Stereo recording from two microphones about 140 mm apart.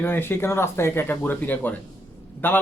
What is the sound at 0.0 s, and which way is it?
Speech, 15° left (ahead or behind).